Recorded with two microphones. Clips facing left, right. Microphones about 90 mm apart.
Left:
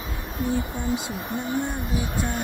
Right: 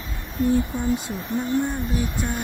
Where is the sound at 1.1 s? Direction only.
50° left (ahead or behind).